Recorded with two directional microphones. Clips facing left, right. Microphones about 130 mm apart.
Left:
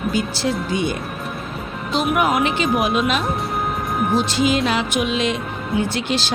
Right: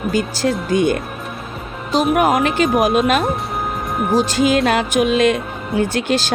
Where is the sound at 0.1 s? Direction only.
45° right (ahead or behind).